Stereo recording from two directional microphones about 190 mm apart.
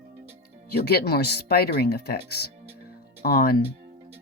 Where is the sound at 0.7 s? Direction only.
55° left (ahead or behind).